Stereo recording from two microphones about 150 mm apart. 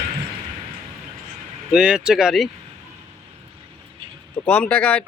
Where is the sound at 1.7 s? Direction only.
5° right (ahead or behind).